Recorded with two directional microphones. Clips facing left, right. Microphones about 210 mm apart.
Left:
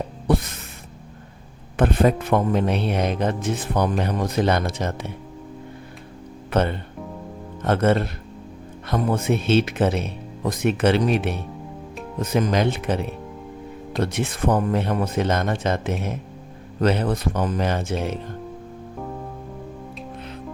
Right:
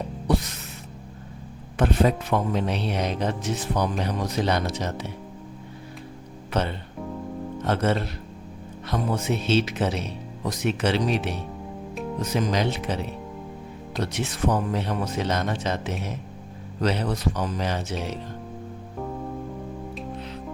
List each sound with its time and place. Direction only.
0.3 s music: 55° left (ahead or behind)
1.7 s speech: 55° left (ahead or behind)
6.5 s speech: 55° left (ahead or behind)